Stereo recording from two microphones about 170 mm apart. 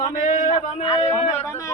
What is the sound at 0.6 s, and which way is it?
Speech, 40° left (ahead or behind).